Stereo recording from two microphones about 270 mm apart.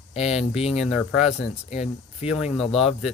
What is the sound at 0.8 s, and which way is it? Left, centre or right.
Speech, centre.